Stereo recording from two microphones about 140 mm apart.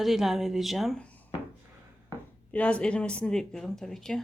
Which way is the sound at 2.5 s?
10° left (ahead or behind).